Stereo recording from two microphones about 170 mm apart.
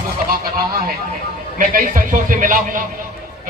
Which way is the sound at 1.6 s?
55° right (ahead or behind).